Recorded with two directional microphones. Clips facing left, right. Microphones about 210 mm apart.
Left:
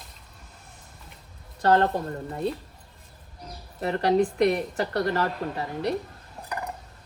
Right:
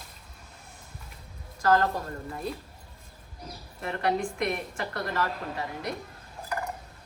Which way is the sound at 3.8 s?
35° left (ahead or behind).